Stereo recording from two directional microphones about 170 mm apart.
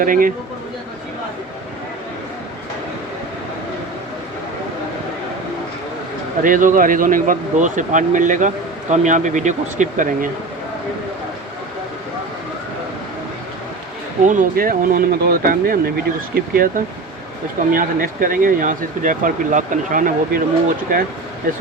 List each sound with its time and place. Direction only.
0.0 s speech: 55° right (ahead or behind)
6.4 s speech: 50° right (ahead or behind)
14.3 s speech: 55° right (ahead or behind)